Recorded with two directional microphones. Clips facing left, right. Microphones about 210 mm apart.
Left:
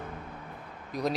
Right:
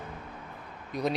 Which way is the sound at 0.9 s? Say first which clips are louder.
Even; centre (ahead or behind).